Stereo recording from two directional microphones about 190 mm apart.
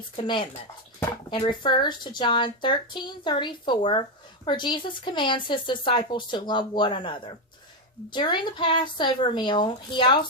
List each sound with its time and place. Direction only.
0.2 s speech: 25° left (ahead or behind)